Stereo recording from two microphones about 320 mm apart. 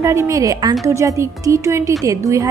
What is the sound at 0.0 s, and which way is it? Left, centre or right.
A woman's voice, centre.